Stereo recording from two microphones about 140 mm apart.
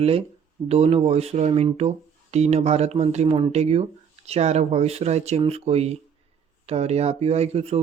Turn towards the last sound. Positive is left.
turn(degrees=-50)  # may be behind; listen again after turning